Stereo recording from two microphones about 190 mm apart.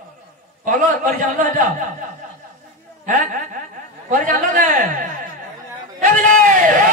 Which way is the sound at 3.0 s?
45° right (ahead or behind).